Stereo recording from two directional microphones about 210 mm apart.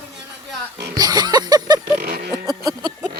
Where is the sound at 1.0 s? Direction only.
20° right (ahead or behind).